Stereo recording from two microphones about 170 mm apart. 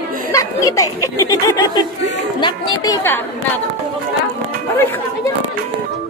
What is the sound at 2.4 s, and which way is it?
Chatter, 25° left (ahead or behind).